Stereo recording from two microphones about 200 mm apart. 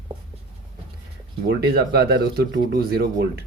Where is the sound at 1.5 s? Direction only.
50° right (ahead or behind).